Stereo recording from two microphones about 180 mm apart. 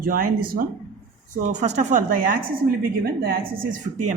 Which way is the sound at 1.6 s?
40° right (ahead or behind).